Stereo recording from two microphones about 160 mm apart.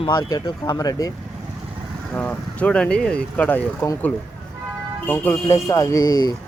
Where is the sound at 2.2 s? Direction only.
10° left (ahead or behind).